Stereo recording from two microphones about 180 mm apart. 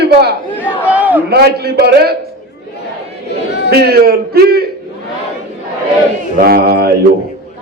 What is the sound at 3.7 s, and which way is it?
Speech, 60° right (ahead or behind).